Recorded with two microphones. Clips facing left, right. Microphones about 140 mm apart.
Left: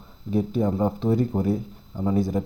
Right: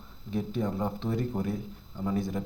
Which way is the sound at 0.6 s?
25° left (ahead or behind).